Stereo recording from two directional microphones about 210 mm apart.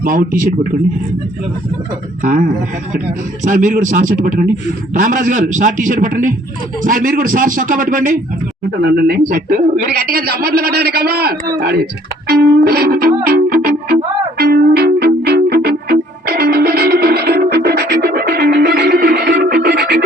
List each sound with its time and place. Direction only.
0.0 s a man's voice: 40° right (ahead or behind)
2.2 s a man's voice: 40° right (ahead or behind)
12.3 s music: 50° right (ahead or behind)